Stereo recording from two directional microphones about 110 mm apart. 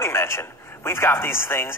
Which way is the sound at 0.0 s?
20° left (ahead or behind).